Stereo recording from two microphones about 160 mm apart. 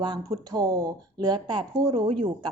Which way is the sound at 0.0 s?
25° right (ahead or behind).